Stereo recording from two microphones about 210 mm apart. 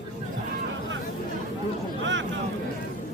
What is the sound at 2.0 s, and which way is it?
Vehicle, 60° right (ahead or behind).